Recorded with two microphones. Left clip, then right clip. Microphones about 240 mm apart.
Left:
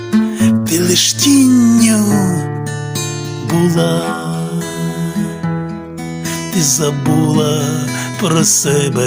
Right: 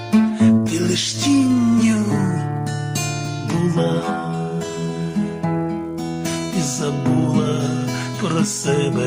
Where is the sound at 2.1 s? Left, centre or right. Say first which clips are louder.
Left 6 dB; left.